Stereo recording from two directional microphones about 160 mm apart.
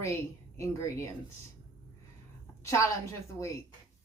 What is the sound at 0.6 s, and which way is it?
Speech, 20° left (ahead or behind).